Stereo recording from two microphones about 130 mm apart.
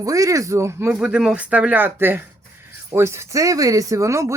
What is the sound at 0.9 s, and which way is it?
Speech, 5° right (ahead or behind).